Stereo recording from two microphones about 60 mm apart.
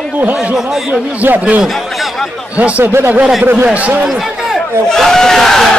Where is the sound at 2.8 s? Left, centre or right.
Right.